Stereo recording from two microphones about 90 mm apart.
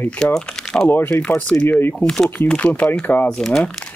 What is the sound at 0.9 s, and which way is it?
Speech, 25° left (ahead or behind).